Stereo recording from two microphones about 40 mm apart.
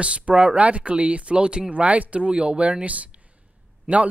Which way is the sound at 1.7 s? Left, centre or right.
Right.